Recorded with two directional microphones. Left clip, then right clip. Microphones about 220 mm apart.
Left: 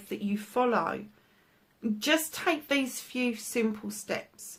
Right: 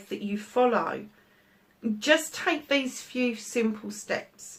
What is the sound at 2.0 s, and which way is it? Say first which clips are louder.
Speech: right 4 dB; 45° left (ahead or behind).